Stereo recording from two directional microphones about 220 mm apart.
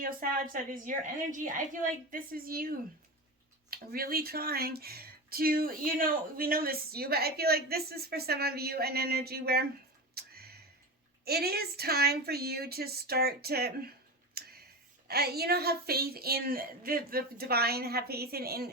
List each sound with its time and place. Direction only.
0.0 s a woman's voice: 40° right (ahead or behind)
10.2 s tick-tock: 45° right (ahead or behind)
11.3 s speech: 45° right (ahead or behind)
14.4 s tick-tock: 45° right (ahead or behind)
15.0 s speech: 45° right (ahead or behind)